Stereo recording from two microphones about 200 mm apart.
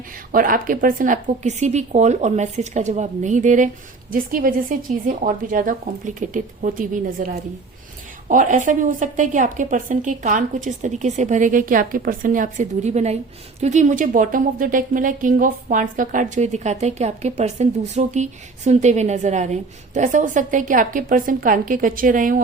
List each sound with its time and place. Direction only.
0.3 s speech: 45° right (ahead or behind)
8.3 s speech: 40° right (ahead or behind)